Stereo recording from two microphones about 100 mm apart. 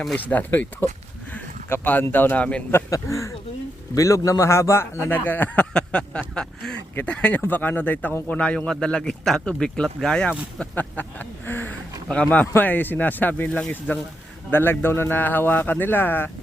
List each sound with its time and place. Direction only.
0.3 s speech: 15° left (ahead or behind)
2.7 s a man's voice: 30° left (ahead or behind)
12.0 s a man's voice: 10° left (ahead or behind)